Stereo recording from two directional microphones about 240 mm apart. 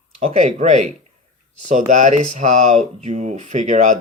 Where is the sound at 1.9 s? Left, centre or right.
Right.